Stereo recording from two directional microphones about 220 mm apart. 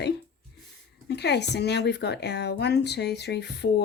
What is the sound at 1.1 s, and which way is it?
Speech, 50° left (ahead or behind).